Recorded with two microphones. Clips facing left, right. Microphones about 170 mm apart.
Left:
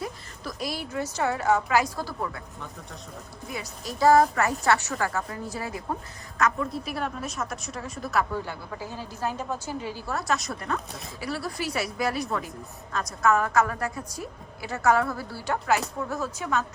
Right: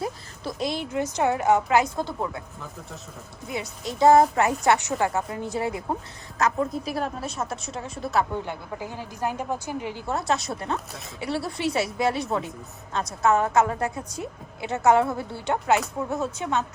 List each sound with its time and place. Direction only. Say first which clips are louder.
0.4 s a woman's voice: right 4 dB; 20° right (ahead or behind)
3.5 s a woman's voice: right 4 dB; 25° right (ahead or behind)
6.4 s a woman's voice: right 2 dB; 40° right (ahead or behind); by 16.6 s 25° right (ahead or behind)